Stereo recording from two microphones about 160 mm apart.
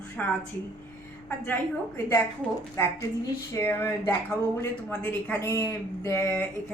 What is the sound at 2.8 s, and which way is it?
Speech, 15° left (ahead or behind).